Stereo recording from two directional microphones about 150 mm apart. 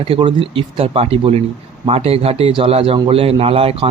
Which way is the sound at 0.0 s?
35° right (ahead or behind).